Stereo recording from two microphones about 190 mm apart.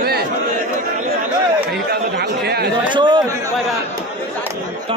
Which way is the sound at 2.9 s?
25° right (ahead or behind).